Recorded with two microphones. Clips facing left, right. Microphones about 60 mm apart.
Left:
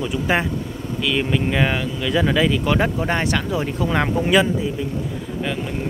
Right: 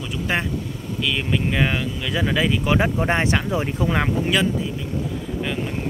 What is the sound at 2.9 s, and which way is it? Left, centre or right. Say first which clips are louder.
Speech: right 1 dB; right.